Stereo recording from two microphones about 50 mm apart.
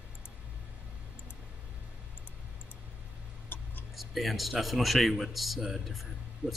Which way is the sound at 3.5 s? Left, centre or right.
Left.